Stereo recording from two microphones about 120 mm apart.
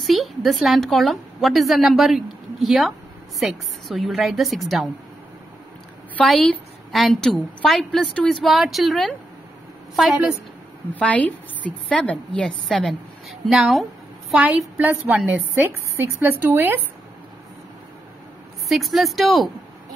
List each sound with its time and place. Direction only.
0.0 s a woman's voice: centre (ahead or behind)
6.2 s a woman's voice: centre (ahead or behind)
10.9 s a woman's voice: 10° left (ahead or behind)
14.3 s a woman's voice: 10° right (ahead or behind)
18.7 s a woman's voice: centre (ahead or behind)